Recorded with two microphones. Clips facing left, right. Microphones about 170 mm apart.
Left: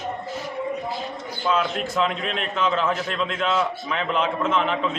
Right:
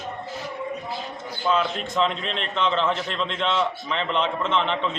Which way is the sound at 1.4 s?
Centre (ahead or behind).